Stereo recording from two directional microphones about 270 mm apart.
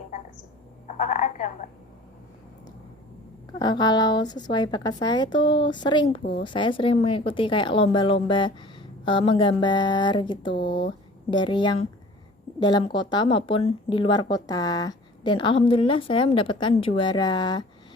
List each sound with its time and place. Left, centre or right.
0.9 s a woman's voice: left
3.6 s speech: centre